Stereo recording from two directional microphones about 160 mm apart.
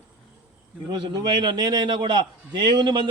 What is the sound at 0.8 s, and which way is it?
A man's voice, 25° right (ahead or behind).